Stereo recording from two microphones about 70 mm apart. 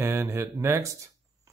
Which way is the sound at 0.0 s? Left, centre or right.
Right.